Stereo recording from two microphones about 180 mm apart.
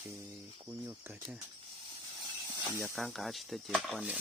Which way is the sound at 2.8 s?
Centre (ahead or behind).